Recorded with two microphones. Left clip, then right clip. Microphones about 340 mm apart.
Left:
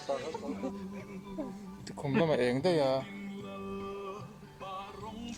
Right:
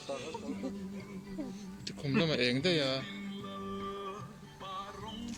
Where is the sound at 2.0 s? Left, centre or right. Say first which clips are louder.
Left 2 dB; centre.